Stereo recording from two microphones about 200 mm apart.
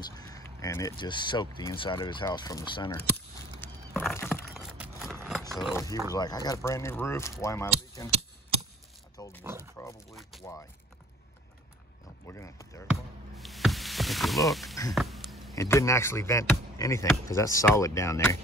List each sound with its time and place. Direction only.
0.1 s speech: 20° left (ahead or behind)
3.6 s a sound: 10° left (ahead or behind)
4.6 s a sound: 5° right (ahead or behind)
6.1 s speech: 20° left (ahead or behind)
9.1 s pig: 15° left (ahead or behind)
10.4 s speech: 15° left (ahead or behind)
12.3 s speech: 15° left (ahead or behind)
13.4 s a sound: centre (ahead or behind)
15.5 s speech: 15° left (ahead or behind)